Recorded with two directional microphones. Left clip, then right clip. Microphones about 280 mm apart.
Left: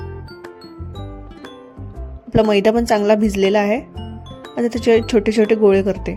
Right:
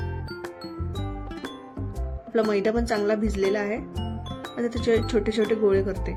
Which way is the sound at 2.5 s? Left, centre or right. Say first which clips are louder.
Left 9 dB; left.